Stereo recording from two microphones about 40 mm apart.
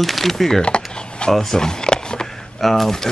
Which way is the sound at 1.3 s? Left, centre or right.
Centre.